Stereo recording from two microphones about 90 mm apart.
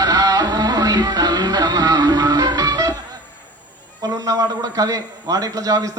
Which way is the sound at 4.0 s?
40° right (ahead or behind).